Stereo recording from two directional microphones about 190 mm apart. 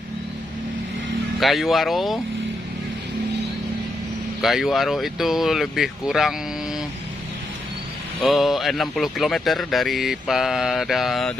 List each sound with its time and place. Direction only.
1.4 s speech: centre (ahead or behind)
4.4 s speech: centre (ahead or behind)
8.2 s speech: centre (ahead or behind)